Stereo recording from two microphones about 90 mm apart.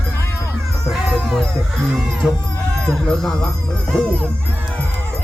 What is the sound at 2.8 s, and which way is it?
Speech, 10° left (ahead or behind).